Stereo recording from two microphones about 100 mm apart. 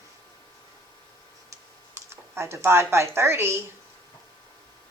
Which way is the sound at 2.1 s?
25° right (ahead or behind).